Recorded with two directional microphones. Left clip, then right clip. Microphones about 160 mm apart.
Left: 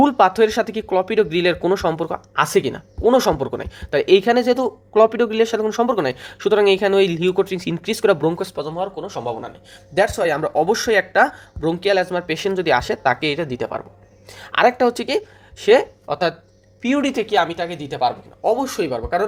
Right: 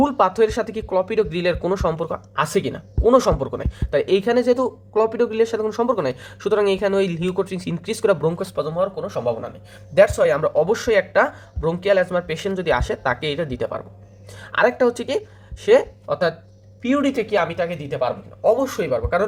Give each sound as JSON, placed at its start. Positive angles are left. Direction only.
{"t": 0.0, "sound": "speech", "side_deg": 25}
{"t": 9.0, "sound": "a woman's voice", "side_deg": 30}